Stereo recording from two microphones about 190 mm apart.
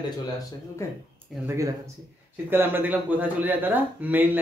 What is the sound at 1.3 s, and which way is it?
Speech, 10° right (ahead or behind).